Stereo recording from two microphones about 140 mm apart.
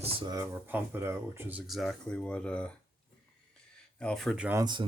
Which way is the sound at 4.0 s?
5° left (ahead or behind).